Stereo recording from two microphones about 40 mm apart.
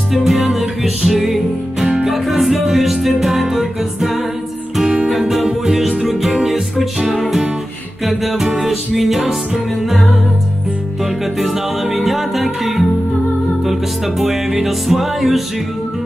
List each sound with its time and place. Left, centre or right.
0.1 s music: centre
4.8 s music: right
5.3 s music: centre
11.3 s music: centre
14.2 s music: centre